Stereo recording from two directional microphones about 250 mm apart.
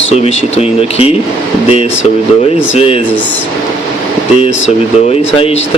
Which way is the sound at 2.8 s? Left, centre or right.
Left.